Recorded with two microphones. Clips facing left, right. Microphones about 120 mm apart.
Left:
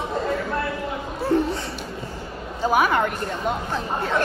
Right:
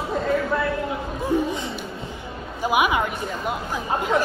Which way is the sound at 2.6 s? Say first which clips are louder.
Left 1 dB; 10° right (ahead or behind).